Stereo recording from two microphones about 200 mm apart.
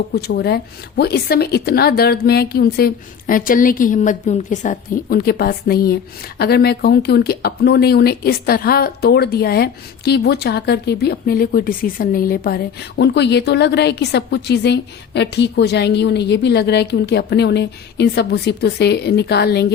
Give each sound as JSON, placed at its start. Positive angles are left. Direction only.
{"t": 0.1, "sound": "a woman's voice", "side_deg": 55}